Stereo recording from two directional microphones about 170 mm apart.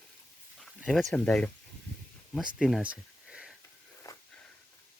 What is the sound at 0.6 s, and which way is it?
Speech, centre (ahead or behind).